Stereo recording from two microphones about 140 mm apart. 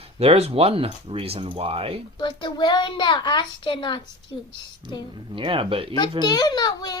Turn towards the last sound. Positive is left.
turn(degrees=30)  # may be behind; listen again after turning